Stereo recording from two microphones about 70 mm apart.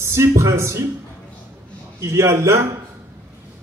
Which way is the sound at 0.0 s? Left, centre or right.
Right.